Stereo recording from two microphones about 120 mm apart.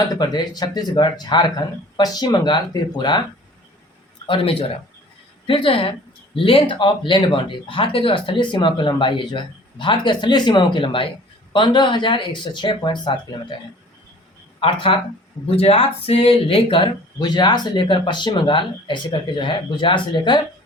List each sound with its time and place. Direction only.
0.0 s speech: 35° left (ahead or behind)
4.3 s speech: 50° left (ahead or behind)
14.9 s speech: 45° left (ahead or behind)